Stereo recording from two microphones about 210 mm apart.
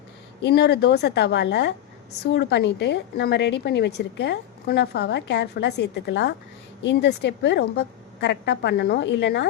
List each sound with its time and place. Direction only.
0.4 s a woman's voice: 50° left (ahead or behind)